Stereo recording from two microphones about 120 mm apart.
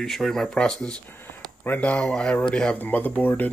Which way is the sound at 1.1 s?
15° left (ahead or behind).